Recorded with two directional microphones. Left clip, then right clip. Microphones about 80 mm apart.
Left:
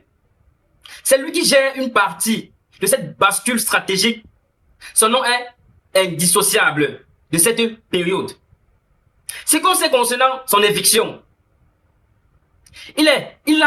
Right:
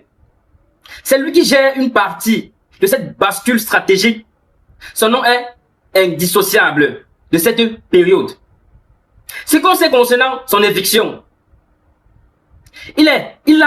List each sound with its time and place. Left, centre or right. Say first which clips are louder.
0.8 s speech: right 2 dB; left
9.2 s speech: right 5 dB; left
12.6 s speech: right 3 dB; left